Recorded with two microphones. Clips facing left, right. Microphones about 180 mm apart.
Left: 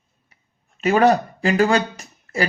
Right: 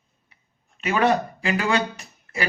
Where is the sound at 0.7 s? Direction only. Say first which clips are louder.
Left 5 dB; 40° left (ahead or behind).